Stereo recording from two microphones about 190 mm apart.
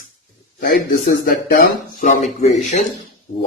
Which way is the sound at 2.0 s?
35° left (ahead or behind).